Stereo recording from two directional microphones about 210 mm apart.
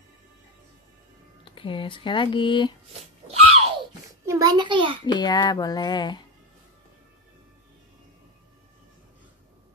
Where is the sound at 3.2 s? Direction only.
25° right (ahead or behind).